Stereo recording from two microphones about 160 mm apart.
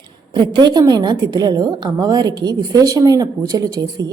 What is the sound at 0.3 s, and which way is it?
A woman's voice, 25° right (ahead or behind).